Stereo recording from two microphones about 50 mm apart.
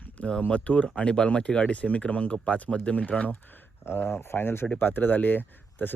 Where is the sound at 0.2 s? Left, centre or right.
Left.